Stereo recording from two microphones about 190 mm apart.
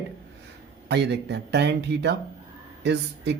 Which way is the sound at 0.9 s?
60° right (ahead or behind).